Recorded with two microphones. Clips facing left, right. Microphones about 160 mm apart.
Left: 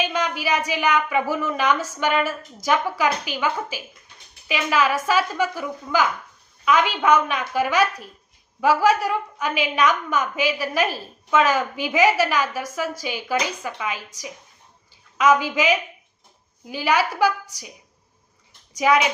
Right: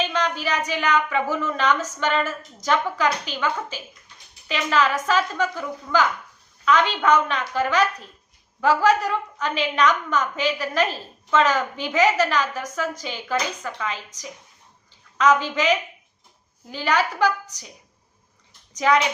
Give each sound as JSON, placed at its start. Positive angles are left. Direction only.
{"t": 0.0, "sound": "a woman's voice", "side_deg": 10}
{"t": 18.7, "sound": "speech", "side_deg": 10}